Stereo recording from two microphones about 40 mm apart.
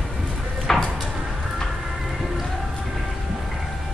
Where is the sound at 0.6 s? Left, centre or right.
Centre.